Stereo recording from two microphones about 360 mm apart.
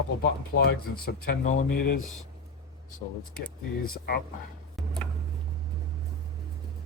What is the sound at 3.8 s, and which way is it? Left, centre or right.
Speech, left.